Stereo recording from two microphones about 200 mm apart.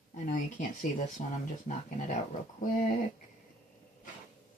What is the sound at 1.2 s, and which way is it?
Speech, 35° left (ahead or behind).